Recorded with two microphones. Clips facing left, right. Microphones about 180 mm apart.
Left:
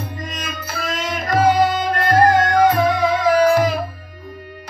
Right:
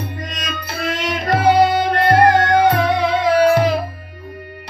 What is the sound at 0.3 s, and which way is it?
Music, 65° right (ahead or behind).